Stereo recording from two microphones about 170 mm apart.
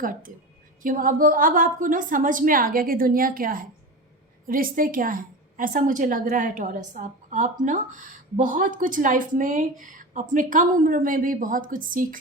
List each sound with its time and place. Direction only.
0.0 s a woman's voice: 55° right (ahead or behind)